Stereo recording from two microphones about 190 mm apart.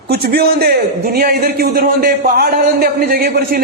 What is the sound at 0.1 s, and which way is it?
A man's voice, 55° right (ahead or behind).